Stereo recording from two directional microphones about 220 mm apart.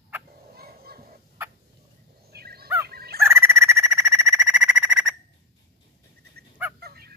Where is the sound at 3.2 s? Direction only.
10° right (ahead or behind).